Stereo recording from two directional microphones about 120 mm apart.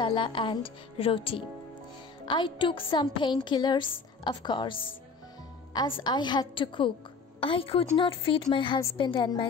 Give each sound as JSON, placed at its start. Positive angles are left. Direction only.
{"t": 0.0, "sound": "a woman's voice", "side_deg": 40}
{"t": 6.0, "sound": "a woman's voice", "side_deg": 35}